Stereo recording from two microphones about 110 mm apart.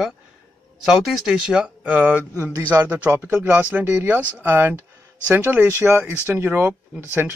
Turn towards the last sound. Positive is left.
turn(degrees=-20)  # may be behind; listen again after turning